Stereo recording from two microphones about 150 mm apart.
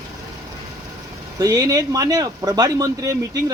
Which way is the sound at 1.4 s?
25° right (ahead or behind).